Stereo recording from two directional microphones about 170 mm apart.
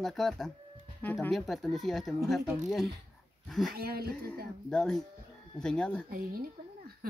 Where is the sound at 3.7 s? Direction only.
65° right (ahead or behind).